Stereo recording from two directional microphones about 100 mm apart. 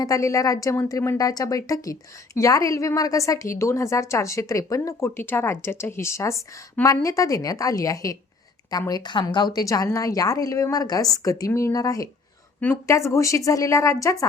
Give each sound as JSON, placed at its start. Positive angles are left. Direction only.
{"t": 0.0, "sound": "a woman's voice", "side_deg": 35}
{"t": 8.9, "sound": "a woman's voice", "side_deg": 45}
{"t": 12.5, "sound": "a woman's voice", "side_deg": 15}
{"t": 12.9, "sound": "a woman's voice", "side_deg": 30}